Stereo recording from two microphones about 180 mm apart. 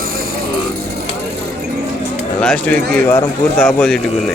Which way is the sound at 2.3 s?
5° left (ahead or behind).